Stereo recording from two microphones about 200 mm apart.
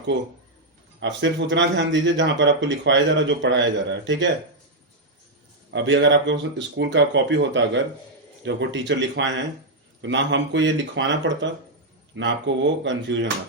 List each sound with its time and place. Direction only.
0.9 s speech: 65° right (ahead or behind)
5.7 s speech: 65° right (ahead or behind)